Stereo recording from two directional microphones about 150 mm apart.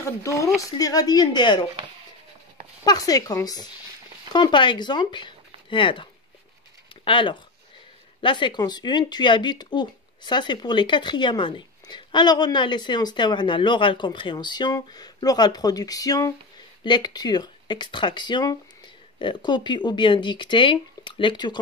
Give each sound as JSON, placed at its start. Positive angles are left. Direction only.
{"t": 0.0, "sound": "speech", "side_deg": 20}
{"t": 2.8, "sound": "speech", "side_deg": 25}
{"t": 7.1, "sound": "speech", "side_deg": 35}